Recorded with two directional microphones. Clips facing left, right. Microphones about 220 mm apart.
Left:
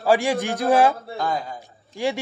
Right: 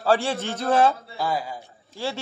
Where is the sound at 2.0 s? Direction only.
15° left (ahead or behind).